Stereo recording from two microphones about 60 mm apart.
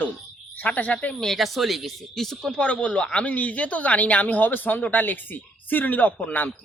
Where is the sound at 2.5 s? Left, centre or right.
Left.